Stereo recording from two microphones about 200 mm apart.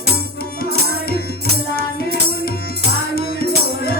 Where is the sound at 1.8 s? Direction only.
50° left (ahead or behind).